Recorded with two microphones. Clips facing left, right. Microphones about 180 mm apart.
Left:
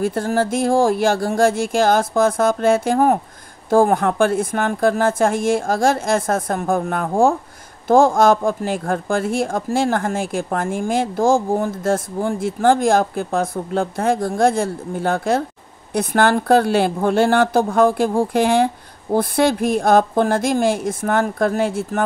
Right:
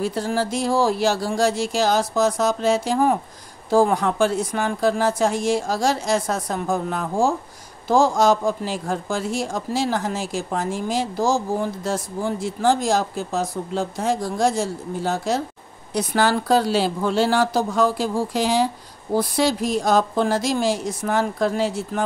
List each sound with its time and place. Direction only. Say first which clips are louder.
0.0 s speech: left 4 dB; 50° left (ahead or behind)